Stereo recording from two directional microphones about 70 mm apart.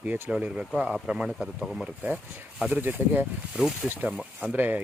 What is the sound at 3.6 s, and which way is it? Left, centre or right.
Speech, centre.